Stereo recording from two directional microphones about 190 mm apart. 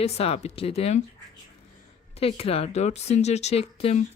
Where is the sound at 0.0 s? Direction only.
30° left (ahead or behind).